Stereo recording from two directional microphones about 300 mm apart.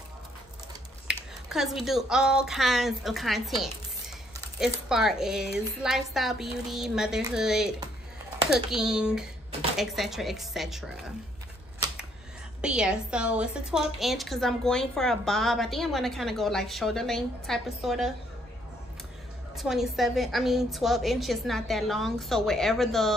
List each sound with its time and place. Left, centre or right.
1.0 s a woman's voice: centre
12.6 s a woman's voice: centre
19.5 s a woman's voice: centre